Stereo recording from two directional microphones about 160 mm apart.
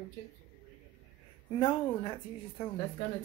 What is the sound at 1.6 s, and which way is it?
Speech, 30° left (ahead or behind).